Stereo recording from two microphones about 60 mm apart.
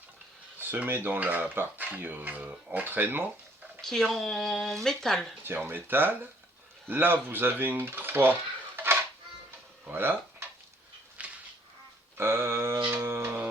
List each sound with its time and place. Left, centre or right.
0.7 s speech: right
3.8 s speech: centre
5.4 s speech: right
9.8 s dishes: right
11.2 s a sound: right
12.1 s a sound: right
12.9 s music: right